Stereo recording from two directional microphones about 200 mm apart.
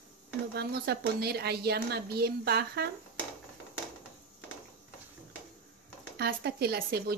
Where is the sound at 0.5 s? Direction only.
55° right (ahead or behind).